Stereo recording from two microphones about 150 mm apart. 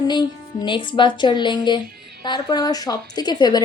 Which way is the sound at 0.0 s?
30° left (ahead or behind).